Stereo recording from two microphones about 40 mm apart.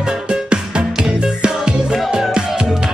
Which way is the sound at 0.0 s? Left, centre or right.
Right.